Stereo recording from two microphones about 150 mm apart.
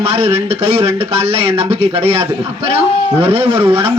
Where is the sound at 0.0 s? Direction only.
40° right (ahead or behind).